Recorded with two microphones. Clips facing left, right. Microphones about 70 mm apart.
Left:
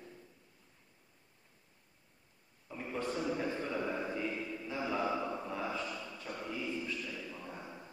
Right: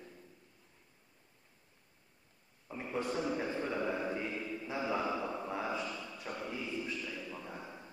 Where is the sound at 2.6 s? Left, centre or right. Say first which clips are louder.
Right 1 dB; centre.